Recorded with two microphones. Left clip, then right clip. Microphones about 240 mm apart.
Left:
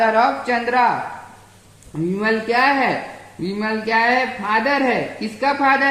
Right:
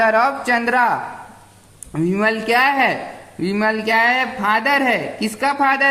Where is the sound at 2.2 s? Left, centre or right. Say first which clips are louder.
Right 1 dB; right.